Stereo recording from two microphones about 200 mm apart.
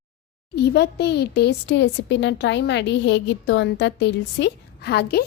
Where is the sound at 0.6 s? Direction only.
55° left (ahead or behind).